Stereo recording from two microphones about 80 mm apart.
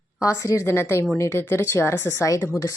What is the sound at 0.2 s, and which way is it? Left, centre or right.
A woman's voice, left.